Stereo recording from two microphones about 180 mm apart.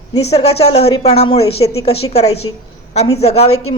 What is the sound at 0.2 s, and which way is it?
A woman's voice, 35° left (ahead or behind).